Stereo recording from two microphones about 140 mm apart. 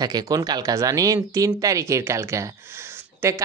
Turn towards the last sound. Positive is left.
turn(degrees=-20)  # may be behind; listen again after turning